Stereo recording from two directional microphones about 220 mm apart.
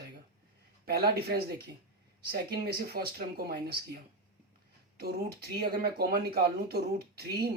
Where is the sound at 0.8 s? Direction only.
45° right (ahead or behind).